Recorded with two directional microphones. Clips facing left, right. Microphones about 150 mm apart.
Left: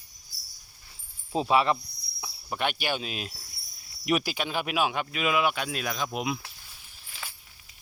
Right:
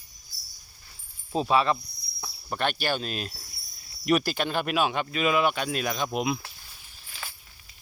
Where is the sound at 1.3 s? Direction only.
20° left (ahead or behind).